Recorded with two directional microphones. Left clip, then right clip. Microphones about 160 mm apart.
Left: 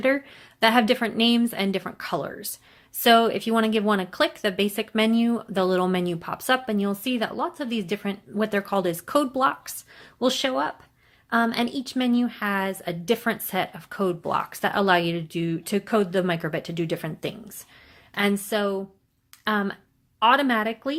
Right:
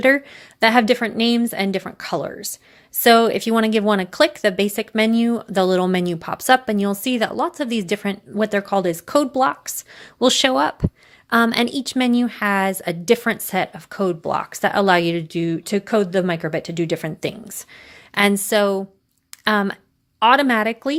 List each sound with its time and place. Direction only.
0.0 s a woman's voice: 40° right (ahead or behind)